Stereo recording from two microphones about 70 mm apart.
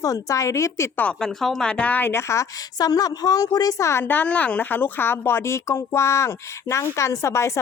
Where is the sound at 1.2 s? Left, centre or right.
Centre; by 2.1 s left.